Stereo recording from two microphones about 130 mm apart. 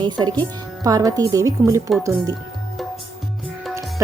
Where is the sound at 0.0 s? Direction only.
35° right (ahead or behind).